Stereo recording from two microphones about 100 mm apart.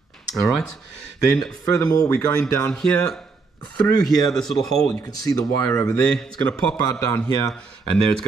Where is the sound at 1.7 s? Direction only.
35° left (ahead or behind).